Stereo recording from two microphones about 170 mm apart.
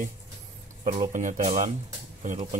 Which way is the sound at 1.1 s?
50° right (ahead or behind).